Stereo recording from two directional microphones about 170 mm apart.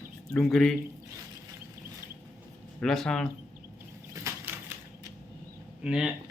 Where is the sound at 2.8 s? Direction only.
5° left (ahead or behind).